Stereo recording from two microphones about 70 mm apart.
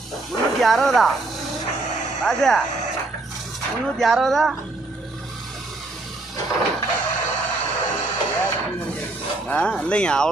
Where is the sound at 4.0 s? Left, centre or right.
Centre.